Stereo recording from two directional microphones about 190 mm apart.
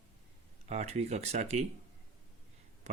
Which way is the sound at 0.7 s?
35° right (ahead or behind).